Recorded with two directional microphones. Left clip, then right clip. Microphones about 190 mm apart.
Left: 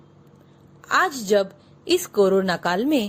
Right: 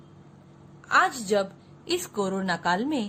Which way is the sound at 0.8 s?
35° left (ahead or behind).